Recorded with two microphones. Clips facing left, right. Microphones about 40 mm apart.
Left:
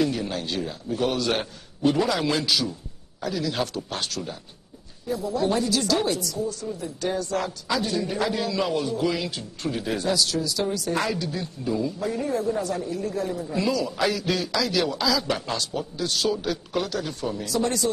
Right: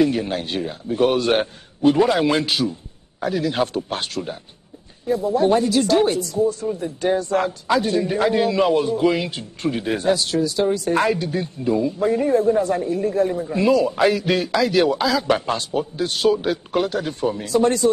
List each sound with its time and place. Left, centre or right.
0.0 s a man's voice: right